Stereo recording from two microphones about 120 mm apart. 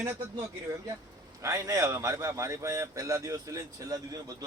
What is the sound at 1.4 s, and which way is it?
Speech, 25° right (ahead or behind).